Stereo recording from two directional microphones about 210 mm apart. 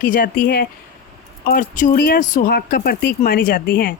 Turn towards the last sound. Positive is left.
turn(degrees=45)  # may be behind; listen again after turning